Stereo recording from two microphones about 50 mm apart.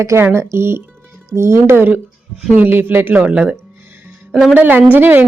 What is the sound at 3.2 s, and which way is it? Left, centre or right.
Speech, right.